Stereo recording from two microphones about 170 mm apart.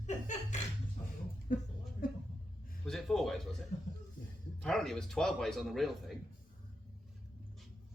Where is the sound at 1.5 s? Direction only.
55° left (ahead or behind).